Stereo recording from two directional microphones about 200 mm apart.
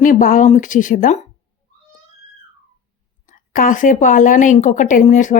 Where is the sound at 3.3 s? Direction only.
40° left (ahead or behind).